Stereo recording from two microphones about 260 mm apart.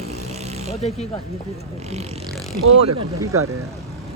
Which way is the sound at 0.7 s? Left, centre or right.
Left.